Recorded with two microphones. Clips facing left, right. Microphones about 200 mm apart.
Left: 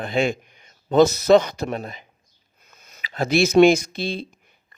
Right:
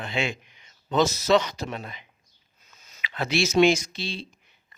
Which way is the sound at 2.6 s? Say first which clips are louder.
Left 5 dB; 60° left (ahead or behind).